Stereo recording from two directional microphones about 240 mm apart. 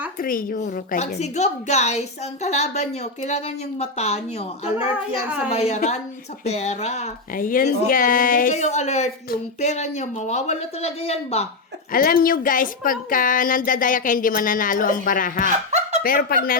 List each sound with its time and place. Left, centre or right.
0.2 s speech: left
11.9 s a woman's voice: left
15.7 s chuckle: right
16.0 s a woman's voice: left